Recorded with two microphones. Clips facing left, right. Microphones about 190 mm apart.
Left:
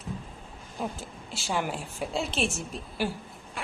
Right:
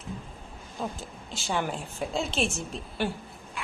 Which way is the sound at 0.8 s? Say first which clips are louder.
Even; 10° left (ahead or behind).